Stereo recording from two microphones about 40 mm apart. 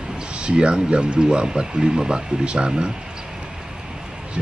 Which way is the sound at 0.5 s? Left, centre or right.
Right.